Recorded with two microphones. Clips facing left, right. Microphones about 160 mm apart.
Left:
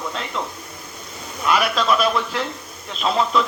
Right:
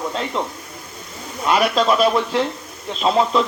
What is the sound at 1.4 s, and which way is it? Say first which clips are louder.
A man's voice: right 3 dB; 30° right (ahead or behind).